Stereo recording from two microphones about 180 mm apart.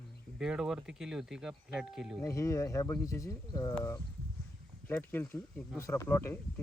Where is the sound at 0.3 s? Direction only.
5° right (ahead or behind).